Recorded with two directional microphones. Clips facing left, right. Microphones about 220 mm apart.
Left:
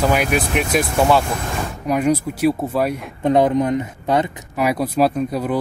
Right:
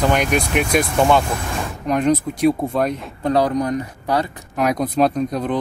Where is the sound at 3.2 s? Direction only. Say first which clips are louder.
Left 3 dB; 20° left (ahead or behind).